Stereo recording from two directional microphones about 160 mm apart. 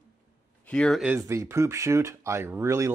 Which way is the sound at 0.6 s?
5° left (ahead or behind).